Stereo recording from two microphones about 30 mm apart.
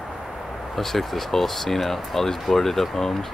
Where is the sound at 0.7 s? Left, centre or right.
Centre.